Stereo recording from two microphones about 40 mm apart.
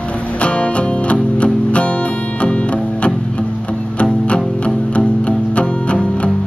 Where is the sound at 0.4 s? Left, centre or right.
Left.